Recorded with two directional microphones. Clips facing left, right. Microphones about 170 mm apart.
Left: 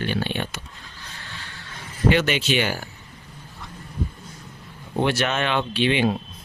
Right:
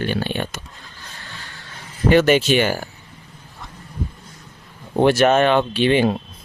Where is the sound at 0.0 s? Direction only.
45° right (ahead or behind).